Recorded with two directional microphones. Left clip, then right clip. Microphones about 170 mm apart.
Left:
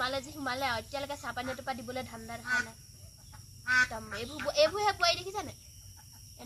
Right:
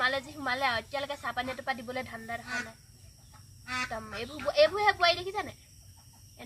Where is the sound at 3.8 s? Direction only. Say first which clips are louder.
Right 2 dB; 20° right (ahead or behind).